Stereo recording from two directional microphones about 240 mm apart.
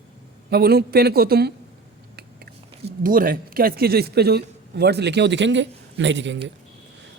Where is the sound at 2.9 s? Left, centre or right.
Right.